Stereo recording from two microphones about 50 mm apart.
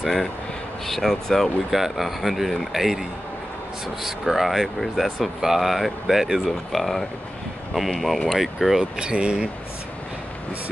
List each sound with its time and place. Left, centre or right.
0.0 s speech: centre
1.7 s speech: centre
8.9 s speech: centre